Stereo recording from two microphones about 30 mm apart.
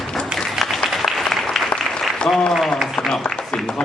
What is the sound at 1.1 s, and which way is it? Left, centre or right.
Applause, centre.